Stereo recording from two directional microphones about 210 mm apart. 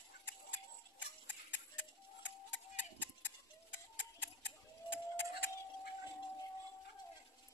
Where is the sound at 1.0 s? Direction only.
60° left (ahead or behind).